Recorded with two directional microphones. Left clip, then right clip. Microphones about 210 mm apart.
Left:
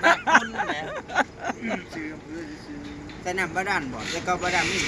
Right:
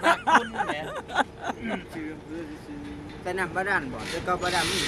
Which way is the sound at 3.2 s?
45° left (ahead or behind).